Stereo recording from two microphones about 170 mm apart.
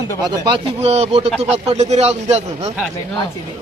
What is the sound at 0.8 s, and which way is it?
A man's voice, 40° right (ahead or behind).